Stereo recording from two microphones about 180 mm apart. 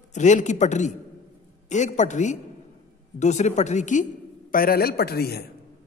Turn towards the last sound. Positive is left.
turn(degrees=60)  # may be behind; listen again after turning